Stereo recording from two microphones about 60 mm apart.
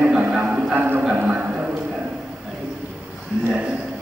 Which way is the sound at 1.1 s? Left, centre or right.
Right.